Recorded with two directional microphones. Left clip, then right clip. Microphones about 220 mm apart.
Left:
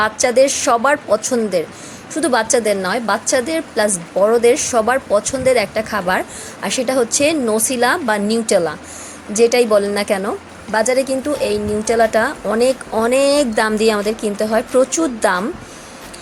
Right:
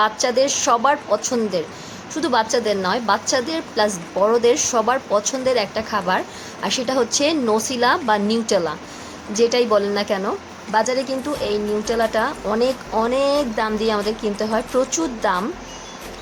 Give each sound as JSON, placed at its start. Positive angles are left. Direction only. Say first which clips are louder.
{"t": 0.0, "sound": "a woman's voice", "louder": "left 4 dB", "side_deg": 15}